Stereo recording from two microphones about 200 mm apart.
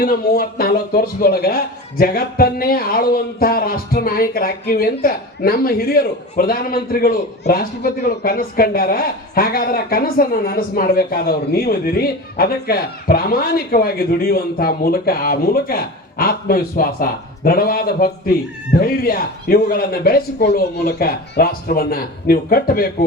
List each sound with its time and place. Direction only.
0.0 s a man's voice: 50° left (ahead or behind)